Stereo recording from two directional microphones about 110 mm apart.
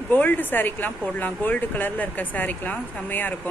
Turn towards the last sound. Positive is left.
turn(degrees=15)  # may be behind; listen again after turning